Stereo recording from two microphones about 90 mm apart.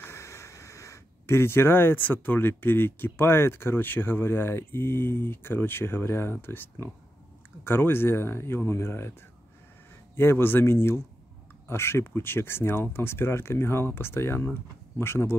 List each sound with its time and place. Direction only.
0.0 s speech: 30° left (ahead or behind)
10.1 s speech: 25° left (ahead or behind)